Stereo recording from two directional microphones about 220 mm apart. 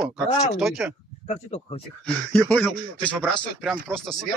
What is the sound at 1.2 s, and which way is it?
Speech, 30° left (ahead or behind).